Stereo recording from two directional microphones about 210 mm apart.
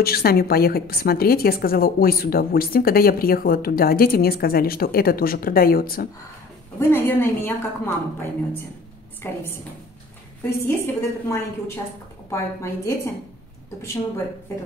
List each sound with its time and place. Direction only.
0.0 s a woman's voice: 45° left (ahead or behind)
6.8 s a woman's voice: 10° left (ahead or behind)
10.4 s a woman's voice: 10° left (ahead or behind)